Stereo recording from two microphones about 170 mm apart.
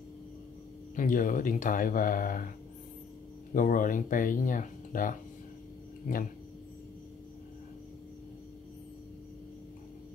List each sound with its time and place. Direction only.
0.9 s speech: 50° left (ahead or behind)
3.5 s speech: 50° left (ahead or behind)